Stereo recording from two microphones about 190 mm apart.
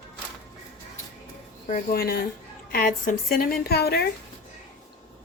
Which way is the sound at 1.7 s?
45° left (ahead or behind).